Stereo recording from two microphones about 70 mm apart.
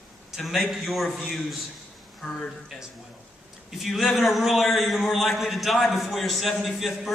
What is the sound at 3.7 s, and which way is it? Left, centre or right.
A man's voice, centre.